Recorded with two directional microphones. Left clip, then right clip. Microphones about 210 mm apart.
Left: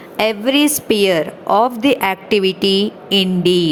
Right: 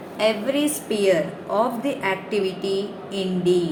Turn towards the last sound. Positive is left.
turn(degrees=50)  # may be behind; listen again after turning